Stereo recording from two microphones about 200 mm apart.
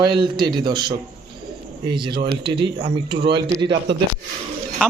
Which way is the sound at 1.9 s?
25° right (ahead or behind).